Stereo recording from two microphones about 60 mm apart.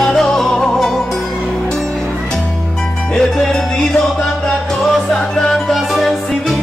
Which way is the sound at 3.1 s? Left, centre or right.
Centre.